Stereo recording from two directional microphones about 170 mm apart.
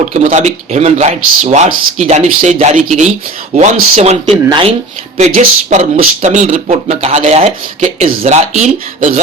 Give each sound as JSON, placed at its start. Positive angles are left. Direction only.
{"t": 0.0, "sound": "speech", "side_deg": -45}
{"t": 4.4, "sound": "speech", "side_deg": -30}
{"t": 5.1, "sound": "speech", "side_deg": -50}